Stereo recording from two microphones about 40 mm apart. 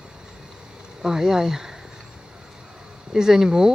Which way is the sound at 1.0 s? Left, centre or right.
Centre.